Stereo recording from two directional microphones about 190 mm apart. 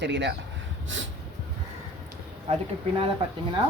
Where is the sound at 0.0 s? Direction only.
65° right (ahead or behind).